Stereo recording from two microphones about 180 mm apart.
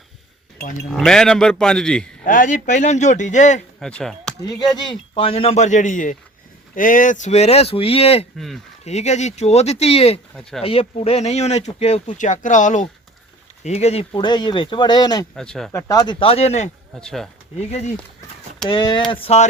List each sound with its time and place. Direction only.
0.9 s a man's voice: 5° left (ahead or behind)
2.2 s speech: 45° left (ahead or behind)
3.8 s speech: 5° left (ahead or behind)
4.4 s speech: 25° left (ahead or behind)
15.4 s a man's voice: centre (ahead or behind)
15.7 s speech: 20° left (ahead or behind)
16.1 s speech: 30° left (ahead or behind)
16.9 s a man's voice: 5° left (ahead or behind)
18.7 s speech: 25° left (ahead or behind)